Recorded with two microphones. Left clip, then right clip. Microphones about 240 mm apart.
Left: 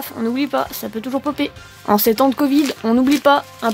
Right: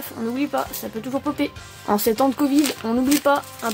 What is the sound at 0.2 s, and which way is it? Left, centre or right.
Speech, left.